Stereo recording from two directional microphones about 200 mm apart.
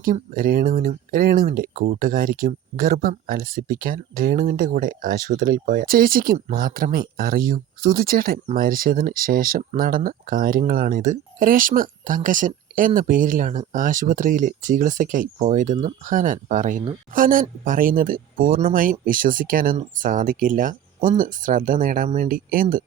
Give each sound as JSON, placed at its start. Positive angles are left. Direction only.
{"t": 0.0, "sound": "speech", "side_deg": -45}